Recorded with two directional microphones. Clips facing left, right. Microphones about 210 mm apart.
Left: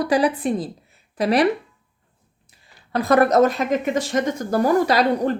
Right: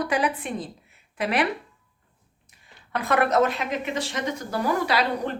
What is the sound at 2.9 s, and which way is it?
Speech, 35° left (ahead or behind).